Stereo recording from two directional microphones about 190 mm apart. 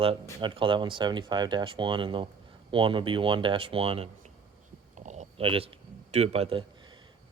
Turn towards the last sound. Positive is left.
turn(degrees=-25)  # may be behind; listen again after turning